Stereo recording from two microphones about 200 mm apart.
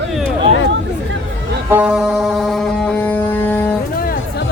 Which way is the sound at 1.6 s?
5° right (ahead or behind).